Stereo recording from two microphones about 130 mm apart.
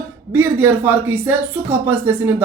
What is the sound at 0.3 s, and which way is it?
Speech, 15° right (ahead or behind).